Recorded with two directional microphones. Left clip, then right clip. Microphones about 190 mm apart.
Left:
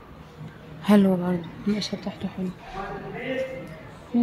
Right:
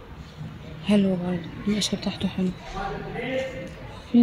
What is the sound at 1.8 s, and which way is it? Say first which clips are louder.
Speech: right 4 dB; 15° right (ahead or behind).